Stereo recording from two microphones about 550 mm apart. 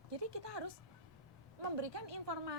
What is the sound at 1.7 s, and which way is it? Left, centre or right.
Speech, right.